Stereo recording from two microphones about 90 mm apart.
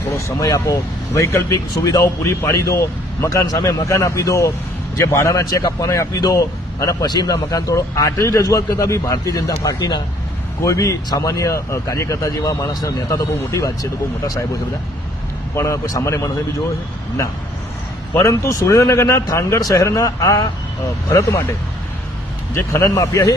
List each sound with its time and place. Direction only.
0.3 s a man's voice: 40° left (ahead or behind)
1.7 s a man's voice: 45° left (ahead or behind)
2.4 s a man's voice: 30° left (ahead or behind); by 10.0 s 50° left (ahead or behind)
10.6 s a man's voice: 35° left (ahead or behind)
15.5 s a man's voice: 35° left (ahead or behind)
18.1 s a man's voice: 35° left (ahead or behind)
22.5 s a man's voice: 30° left (ahead or behind)